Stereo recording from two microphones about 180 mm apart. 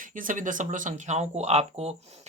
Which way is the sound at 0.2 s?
45° right (ahead or behind).